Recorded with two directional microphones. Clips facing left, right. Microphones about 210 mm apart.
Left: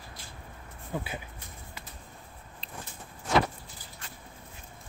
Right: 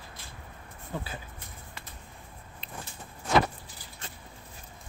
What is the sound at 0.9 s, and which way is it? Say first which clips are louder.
Speech: left 2 dB; 10° left (ahead or behind).